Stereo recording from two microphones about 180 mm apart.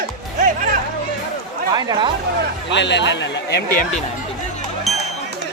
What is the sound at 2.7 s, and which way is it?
Speech, 80° left.